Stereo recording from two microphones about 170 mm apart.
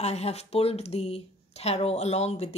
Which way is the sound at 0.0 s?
40° left (ahead or behind).